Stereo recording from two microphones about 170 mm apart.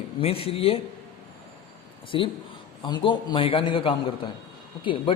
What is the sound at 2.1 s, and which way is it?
Speech, 30° left (ahead or behind).